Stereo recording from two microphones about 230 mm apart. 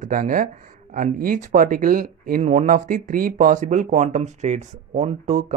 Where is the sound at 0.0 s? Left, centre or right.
Right.